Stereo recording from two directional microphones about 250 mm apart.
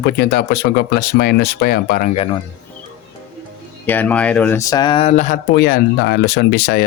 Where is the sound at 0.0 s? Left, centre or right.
Left.